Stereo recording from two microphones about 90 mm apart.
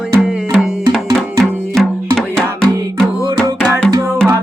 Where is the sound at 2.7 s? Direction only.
40° right (ahead or behind).